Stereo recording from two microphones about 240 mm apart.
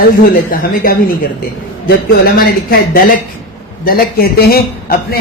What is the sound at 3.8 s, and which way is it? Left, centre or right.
Speech, left.